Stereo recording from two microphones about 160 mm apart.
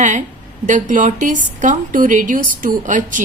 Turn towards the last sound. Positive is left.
turn(degrees=-55)  # may be behind; listen again after turning